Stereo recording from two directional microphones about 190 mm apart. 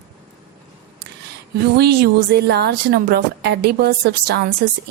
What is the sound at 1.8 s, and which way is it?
A woman's voice, 55° right (ahead or behind).